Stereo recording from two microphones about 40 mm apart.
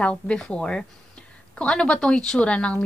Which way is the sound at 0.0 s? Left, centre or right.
Left.